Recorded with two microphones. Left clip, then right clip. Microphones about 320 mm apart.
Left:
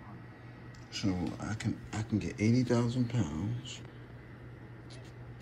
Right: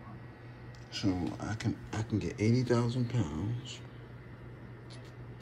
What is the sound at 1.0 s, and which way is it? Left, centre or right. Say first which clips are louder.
Speech: right 2 dB; centre.